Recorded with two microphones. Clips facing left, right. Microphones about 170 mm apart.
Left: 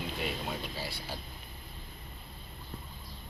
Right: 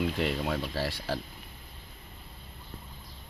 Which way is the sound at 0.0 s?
80° right.